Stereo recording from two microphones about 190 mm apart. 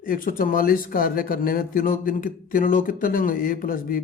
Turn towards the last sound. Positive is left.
turn(degrees=50)  # may be behind; listen again after turning